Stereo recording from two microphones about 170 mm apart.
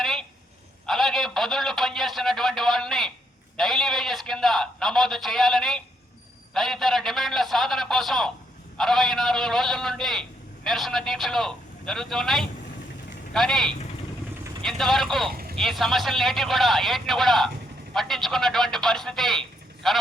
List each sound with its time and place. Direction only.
0.0 s a sound: centre (ahead or behind)
8.8 s a man's voice: centre (ahead or behind)
15.3 s vehicle: 60° right (ahead or behind)
15.5 s a man's voice: centre (ahead or behind)